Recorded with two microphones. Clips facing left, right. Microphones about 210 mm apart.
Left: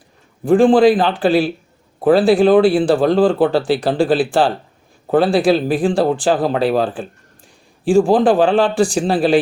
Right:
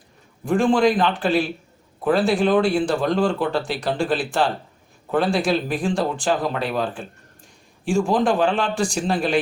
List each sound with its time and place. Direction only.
0.4 s speech: 35° left (ahead or behind)